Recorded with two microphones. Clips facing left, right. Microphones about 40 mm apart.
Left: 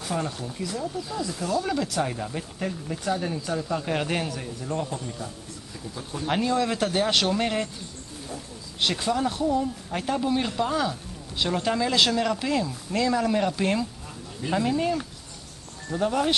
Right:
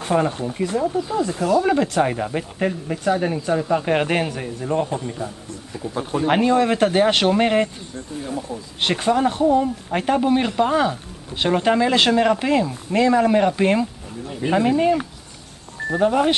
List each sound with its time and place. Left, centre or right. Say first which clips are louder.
0.0 s speech: right 9 dB; right